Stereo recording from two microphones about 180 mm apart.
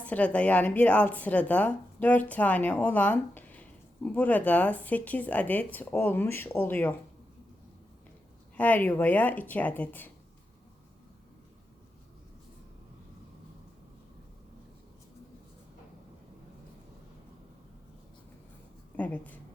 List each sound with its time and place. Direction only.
0.0 s speech: 5° left (ahead or behind)
8.5 s speech: 10° left (ahead or behind)
18.9 s speech: 10° left (ahead or behind)